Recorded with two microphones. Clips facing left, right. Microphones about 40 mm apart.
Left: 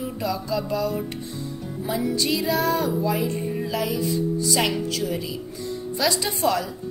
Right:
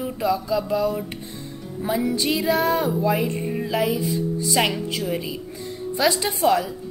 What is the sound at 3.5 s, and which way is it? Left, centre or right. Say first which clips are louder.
Music: right 3 dB; centre.